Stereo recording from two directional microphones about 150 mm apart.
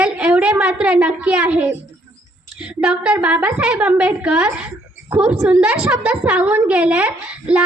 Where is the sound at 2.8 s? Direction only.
5° right (ahead or behind).